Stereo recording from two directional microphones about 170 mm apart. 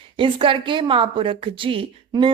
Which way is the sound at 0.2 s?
30° right (ahead or behind).